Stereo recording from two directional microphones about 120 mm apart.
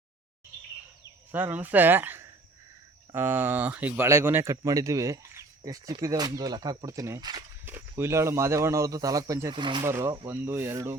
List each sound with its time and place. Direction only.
1.3 s speech: 15° right (ahead or behind); by 7.4 s 35° right (ahead or behind)
7.6 s speech: 20° right (ahead or behind)
9.5 s speech: 40° right (ahead or behind)
9.8 s speech: 25° right (ahead or behind)